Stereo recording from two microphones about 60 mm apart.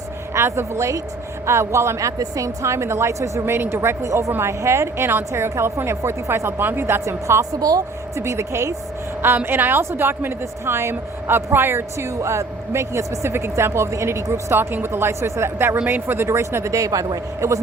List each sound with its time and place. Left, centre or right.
0.3 s a woman's voice: right
3.4 s speech: right
3.8 s a woman's voice: right
4.3 s speech: right
6.6 s speech: right
7.5 s speech: right
8.1 s speech: right
9.2 s a woman's voice: right
11.9 s speech: right
14.5 s a woman's voice: right
16.7 s a woman's voice: right